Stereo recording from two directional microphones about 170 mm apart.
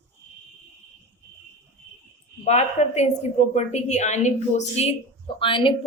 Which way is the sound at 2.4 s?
40° left (ahead or behind).